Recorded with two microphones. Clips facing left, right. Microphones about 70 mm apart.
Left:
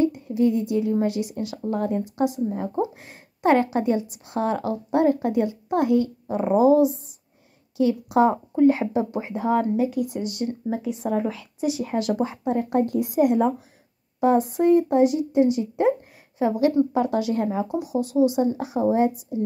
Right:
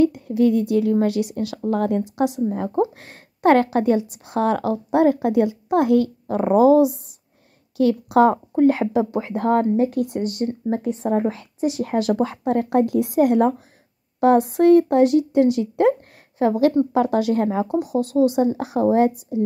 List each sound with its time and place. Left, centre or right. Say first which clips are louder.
0.0 s a woman's voice: right 4 dB; right
1.7 s a woman's voice: right 4 dB; right
7.7 s speech: right 3 dB; right
10.2 s speech: right 4 dB; right
11.8 s a woman's voice: right 5 dB; right
16.9 s speech: right 4 dB; right
18.0 s speech: right 1 dB; centre
18.3 s speech: right 3 dB; right